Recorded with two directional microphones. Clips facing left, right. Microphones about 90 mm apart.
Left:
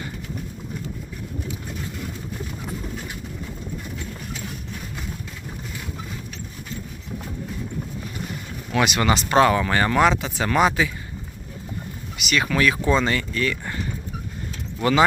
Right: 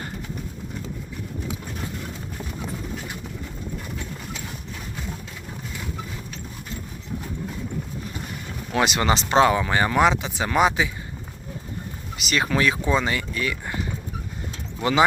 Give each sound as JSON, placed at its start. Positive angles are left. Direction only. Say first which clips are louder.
{"t": 8.7, "sound": "speech", "louder": "left 1 dB", "side_deg": -30}
{"t": 12.1, "sound": "speech", "louder": "left 1 dB", "side_deg": -35}